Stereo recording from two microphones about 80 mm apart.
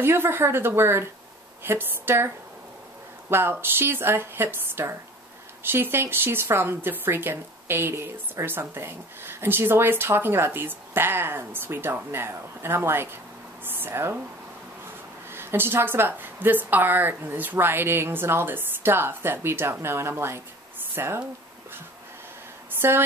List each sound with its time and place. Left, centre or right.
0.0 s speech: right
15.3 s speech: right
22.8 s a woman's voice: right